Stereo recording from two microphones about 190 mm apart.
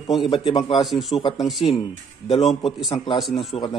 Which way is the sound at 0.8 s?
Centre (ahead or behind).